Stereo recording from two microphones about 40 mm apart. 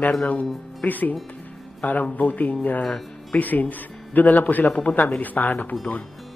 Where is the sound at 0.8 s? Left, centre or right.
Left.